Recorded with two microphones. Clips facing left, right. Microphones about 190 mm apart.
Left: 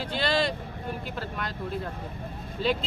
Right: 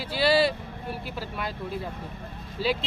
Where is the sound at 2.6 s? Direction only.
5° right (ahead or behind).